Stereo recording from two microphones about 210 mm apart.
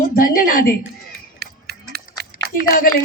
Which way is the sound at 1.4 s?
50° right (ahead or behind).